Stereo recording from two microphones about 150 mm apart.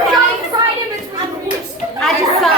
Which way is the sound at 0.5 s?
25° right (ahead or behind).